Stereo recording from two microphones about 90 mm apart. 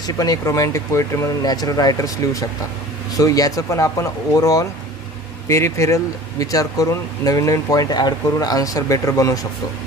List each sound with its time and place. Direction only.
0.0 s speech: 45° left (ahead or behind)
1.4 s speech: 45° left (ahead or behind)